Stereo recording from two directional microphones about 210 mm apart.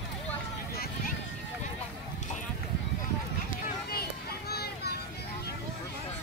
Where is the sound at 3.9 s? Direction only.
45° left (ahead or behind).